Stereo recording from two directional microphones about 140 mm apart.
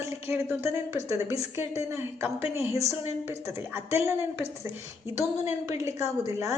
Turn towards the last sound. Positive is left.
turn(degrees=-20)  # may be behind; listen again after turning